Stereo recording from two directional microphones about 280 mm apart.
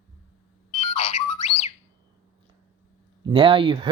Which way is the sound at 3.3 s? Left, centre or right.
Centre.